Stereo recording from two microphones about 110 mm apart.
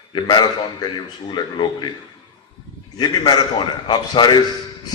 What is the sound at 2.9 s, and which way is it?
A man's voice, 40° left (ahead or behind).